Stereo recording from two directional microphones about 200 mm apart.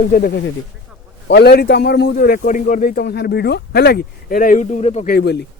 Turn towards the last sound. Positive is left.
turn(degrees=55)  # may be behind; listen again after turning